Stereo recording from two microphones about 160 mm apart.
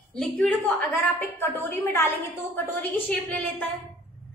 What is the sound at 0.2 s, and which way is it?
A woman's voice, 5° left (ahead or behind).